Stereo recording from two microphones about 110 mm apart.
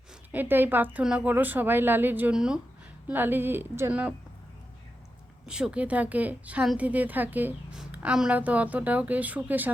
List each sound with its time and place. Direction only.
0.3 s speech: 15° right (ahead or behind)
2.3 s speech: 5° right (ahead or behind)
3.1 s a woman's voice: 20° right (ahead or behind)
5.5 s speech: 10° right (ahead or behind)
7.8 s speech: 5° right (ahead or behind)